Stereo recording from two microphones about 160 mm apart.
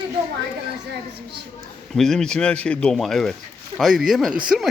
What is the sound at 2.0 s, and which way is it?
Speech, 5° left (ahead or behind).